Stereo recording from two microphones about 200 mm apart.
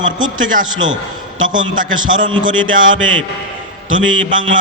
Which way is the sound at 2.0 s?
25° right (ahead or behind).